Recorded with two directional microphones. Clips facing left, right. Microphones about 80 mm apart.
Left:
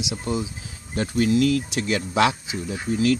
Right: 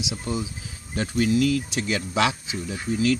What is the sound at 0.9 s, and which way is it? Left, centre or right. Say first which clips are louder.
Speech: left 2 dB; left.